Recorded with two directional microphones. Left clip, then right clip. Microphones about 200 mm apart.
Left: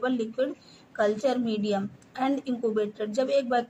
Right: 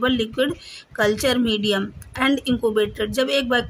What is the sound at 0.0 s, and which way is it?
A woman's voice, 45° right (ahead or behind).